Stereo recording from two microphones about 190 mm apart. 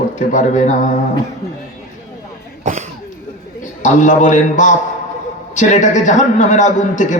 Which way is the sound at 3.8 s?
40° left (ahead or behind).